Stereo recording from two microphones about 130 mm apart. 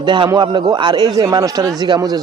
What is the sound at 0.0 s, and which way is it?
A man's voice, 35° right (ahead or behind).